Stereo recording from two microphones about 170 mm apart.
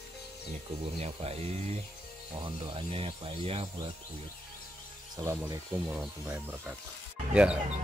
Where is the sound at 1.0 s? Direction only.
40° right (ahead or behind).